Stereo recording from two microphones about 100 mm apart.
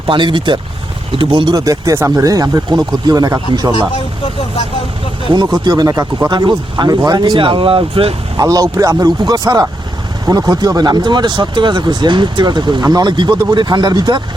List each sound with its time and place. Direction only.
0.1 s speech: 55° right (ahead or behind)
1.5 s speech: 35° right (ahead or behind)
5.3 s speech: 45° right (ahead or behind); by 8.1 s 65° right (ahead or behind)
8.4 s speech: 35° right (ahead or behind)